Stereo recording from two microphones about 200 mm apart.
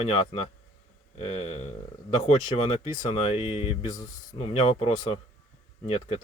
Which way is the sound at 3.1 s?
30° left (ahead or behind).